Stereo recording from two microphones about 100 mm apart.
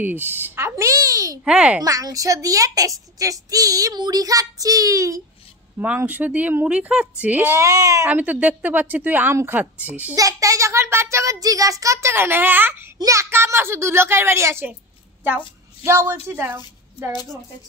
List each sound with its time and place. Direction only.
0.0 s speech: 20° right (ahead or behind)
1.4 s speech: 10° right (ahead or behind)
1.8 s a woman's voice: 35° right (ahead or behind)
5.8 s speech: 20° right (ahead or behind)
7.6 s a woman's voice: 35° right (ahead or behind)
8.1 s speech: 15° right (ahead or behind)
10.1 s a child's voice: 35° right (ahead or behind)